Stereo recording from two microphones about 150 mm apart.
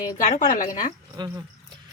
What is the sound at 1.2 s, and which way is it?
Speech, 30° right (ahead or behind).